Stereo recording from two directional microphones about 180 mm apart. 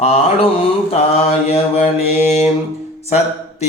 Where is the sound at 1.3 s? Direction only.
35° left (ahead or behind).